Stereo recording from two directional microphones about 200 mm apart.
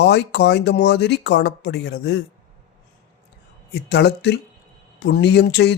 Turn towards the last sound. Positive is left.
turn(degrees=55)  # may be behind; listen again after turning